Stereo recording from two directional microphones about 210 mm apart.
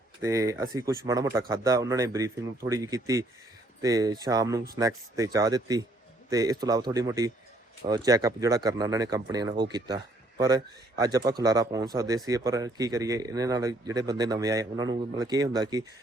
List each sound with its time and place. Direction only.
0.2 s speech: 15° right (ahead or behind)